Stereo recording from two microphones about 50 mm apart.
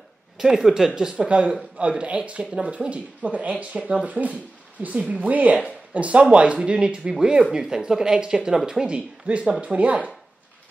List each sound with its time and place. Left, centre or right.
0.4 s speech: centre
1.1 s speech: right
5.0 s speech: centre
5.3 s speech: right